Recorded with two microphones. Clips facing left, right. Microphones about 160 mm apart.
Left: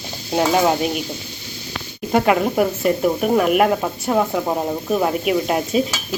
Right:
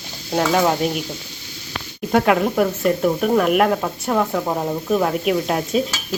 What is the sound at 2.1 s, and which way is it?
Speech, centre (ahead or behind).